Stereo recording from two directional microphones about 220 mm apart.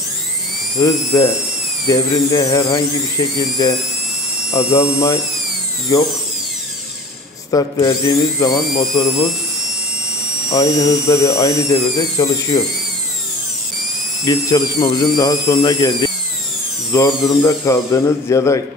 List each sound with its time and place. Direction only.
0.7 s speech: 15° left (ahead or behind)
4.7 s speech: 15° left (ahead or behind)
7.5 s speech: 15° left (ahead or behind)
10.5 s speech: 15° left (ahead or behind)
14.2 s speech: 15° left (ahead or behind)